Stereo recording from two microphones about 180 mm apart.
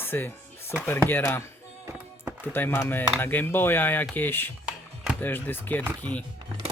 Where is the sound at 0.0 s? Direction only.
10° left (ahead or behind).